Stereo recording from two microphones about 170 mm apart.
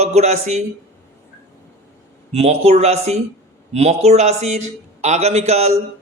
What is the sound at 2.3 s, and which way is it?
Speech, 35° right (ahead or behind).